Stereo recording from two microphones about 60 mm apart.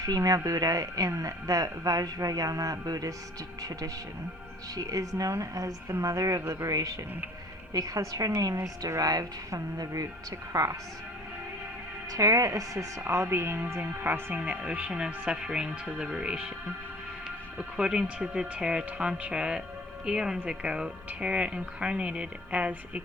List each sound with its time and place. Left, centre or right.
0.0 s speech: right
6.4 s a woman's voice: right
6.7 s speech: right
8.5 s speech: right
10.5 s a woman's voice: right
12.1 s a woman's voice: right
14.0 s speech: right